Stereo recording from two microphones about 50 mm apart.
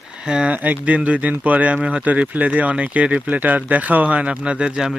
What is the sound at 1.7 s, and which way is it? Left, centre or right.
Speech, centre.